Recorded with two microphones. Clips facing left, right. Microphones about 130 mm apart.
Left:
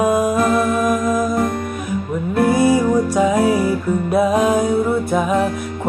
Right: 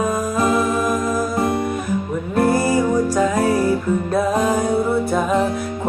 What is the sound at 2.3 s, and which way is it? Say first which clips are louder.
Music: left 2 dB; centre (ahead or behind).